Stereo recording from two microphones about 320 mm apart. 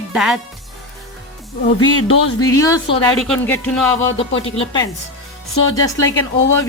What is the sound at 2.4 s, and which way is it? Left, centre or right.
A woman's voice, centre.